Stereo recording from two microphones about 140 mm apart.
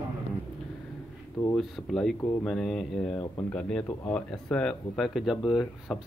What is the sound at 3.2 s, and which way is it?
Speech, 15° left (ahead or behind).